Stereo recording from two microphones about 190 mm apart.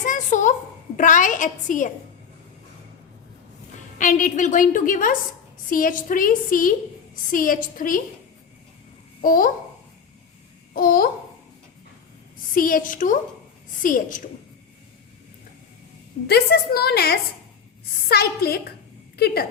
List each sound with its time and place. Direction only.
0.0 s a sound: 40° left (ahead or behind)
0.9 s a woman's voice: 40° left (ahead or behind)
3.9 s a woman's voice: 45° left (ahead or behind)
9.2 s a woman's voice: 45° left (ahead or behind)
10.8 s a woman's voice: 50° left (ahead or behind)
12.5 s a woman's voice: 45° left (ahead or behind)
16.2 s a woman's voice: 55° left (ahead or behind)